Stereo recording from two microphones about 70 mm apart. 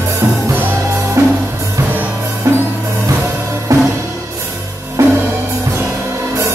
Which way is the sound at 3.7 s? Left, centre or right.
Right.